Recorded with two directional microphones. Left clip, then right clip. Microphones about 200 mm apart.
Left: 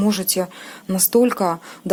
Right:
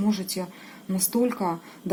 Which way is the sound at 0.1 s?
50° left (ahead or behind).